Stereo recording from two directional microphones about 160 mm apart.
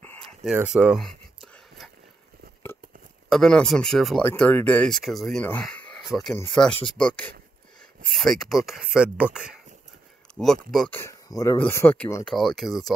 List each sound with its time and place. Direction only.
0.0 s a sound: 15° left (ahead or behind)
0.7 s a sound: centre (ahead or behind)
3.3 s speech: 5° left (ahead or behind)
4.2 s speech: 10° left (ahead or behind)
10.9 s speech: 15° left (ahead or behind)
12.3 s speech: centre (ahead or behind)